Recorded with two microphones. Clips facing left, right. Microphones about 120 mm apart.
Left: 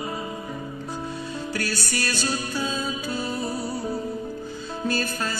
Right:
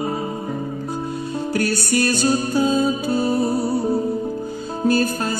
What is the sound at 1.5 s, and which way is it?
Music, 50° right (ahead or behind).